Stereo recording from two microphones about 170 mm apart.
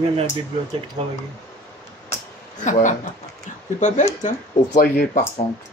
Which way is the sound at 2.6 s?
45° left (ahead or behind).